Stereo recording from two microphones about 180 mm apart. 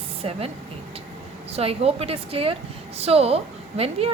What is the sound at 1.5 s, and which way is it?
A woman's voice, 35° right (ahead or behind).